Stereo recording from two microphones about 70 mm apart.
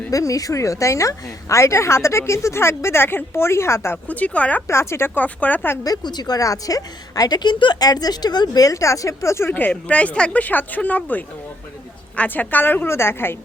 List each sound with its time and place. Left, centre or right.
0.1 s a woman's voice: left
4.1 s speech: left
4.7 s speech: left
5.1 s speech: left
5.8 s a woman's voice: left
9.5 s speech: left